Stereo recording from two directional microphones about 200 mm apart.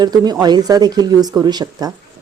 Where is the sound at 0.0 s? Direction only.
20° right (ahead or behind).